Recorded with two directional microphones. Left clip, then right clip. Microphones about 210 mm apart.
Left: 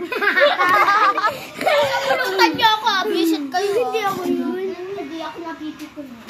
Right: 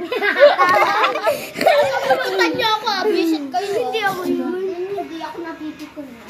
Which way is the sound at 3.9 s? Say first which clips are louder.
Right 1 dB; centre (ahead or behind).